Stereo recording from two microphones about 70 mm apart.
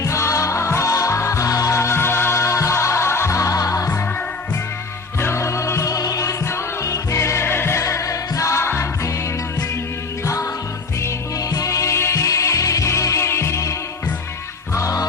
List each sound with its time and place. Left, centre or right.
0.0 s music: left
5.2 s music: left
11.3 s music: left
14.8 s music: left